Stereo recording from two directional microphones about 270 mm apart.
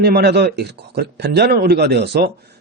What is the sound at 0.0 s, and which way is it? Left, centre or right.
A man's voice, right.